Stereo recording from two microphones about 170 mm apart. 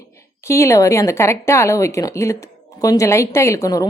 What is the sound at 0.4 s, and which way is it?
Speech, 15° left (ahead or behind).